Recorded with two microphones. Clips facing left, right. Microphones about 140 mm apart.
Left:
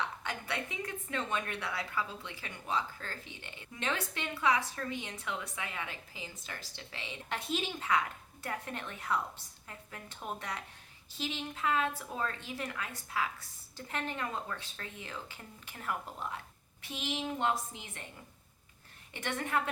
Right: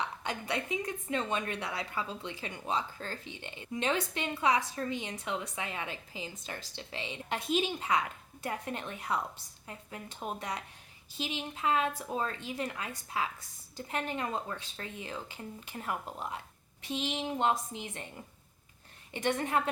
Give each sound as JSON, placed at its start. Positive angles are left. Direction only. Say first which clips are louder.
{"t": 0.2, "sound": "a woman's voice", "louder": "right 3 dB", "side_deg": -20}
{"t": 19.1, "sound": "a woman's voice", "louder": "right 4 dB", "side_deg": -20}